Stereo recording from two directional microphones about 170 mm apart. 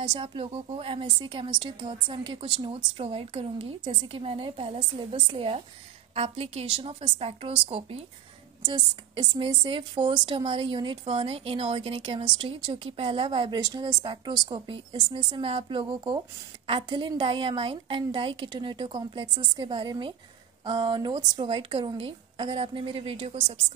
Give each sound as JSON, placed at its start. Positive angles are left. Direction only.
{"t": 0.0, "sound": "a woman's voice", "side_deg": -30}